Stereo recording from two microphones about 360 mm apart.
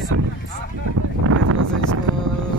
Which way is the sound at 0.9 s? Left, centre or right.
Right.